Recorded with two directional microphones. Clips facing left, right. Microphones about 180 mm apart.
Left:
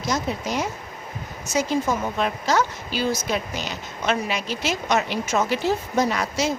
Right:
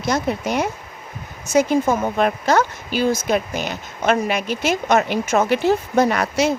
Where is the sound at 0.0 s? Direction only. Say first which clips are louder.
Right 4 dB; 60° right (ahead or behind).